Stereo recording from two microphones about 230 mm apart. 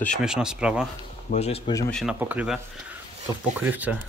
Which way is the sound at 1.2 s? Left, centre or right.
Left.